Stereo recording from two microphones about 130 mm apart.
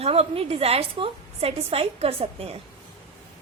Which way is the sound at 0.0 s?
50° right (ahead or behind).